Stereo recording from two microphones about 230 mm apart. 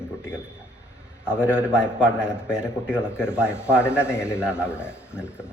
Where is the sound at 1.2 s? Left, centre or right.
Centre.